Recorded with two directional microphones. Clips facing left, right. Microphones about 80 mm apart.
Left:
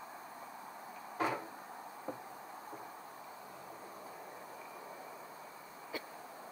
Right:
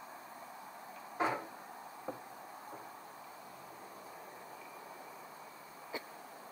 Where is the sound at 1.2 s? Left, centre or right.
Right.